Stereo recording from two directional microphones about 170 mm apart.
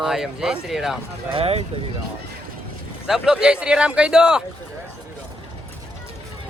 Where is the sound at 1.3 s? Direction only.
35° right (ahead or behind).